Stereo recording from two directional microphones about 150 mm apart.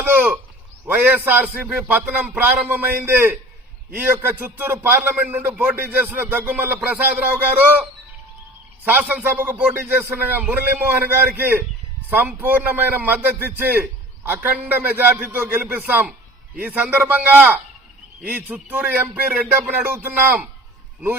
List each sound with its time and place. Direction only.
0.0 s speech: 10° right (ahead or behind)